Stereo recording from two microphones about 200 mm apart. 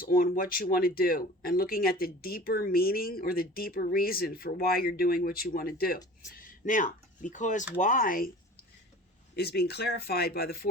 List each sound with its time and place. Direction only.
0.0 s speech: 45° left (ahead or behind)
9.3 s speech: 55° left (ahead or behind)